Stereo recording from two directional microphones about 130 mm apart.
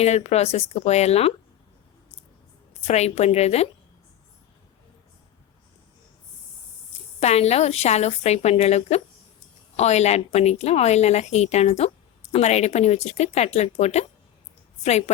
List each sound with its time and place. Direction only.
0.0 s a woman's voice: 55° left (ahead or behind)
2.8 s a woman's voice: 55° left (ahead or behind)
7.2 s a woman's voice: 55° left (ahead or behind)